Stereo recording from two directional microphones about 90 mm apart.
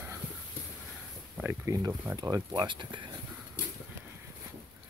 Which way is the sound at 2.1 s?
45° right (ahead or behind).